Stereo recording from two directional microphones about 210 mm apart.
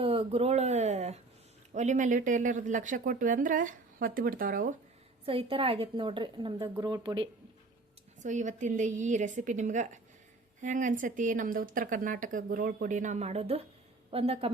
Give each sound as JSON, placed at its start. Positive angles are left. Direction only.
{"t": 0.0, "sound": "a sound", "side_deg": -25}
{"t": 1.7, "sound": "speech", "side_deg": -35}
{"t": 5.2, "sound": "a woman's voice", "side_deg": -25}
{"t": 8.2, "sound": "a woman's voice", "side_deg": -35}